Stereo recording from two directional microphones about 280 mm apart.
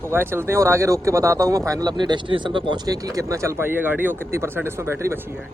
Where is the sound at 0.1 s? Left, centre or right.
Centre.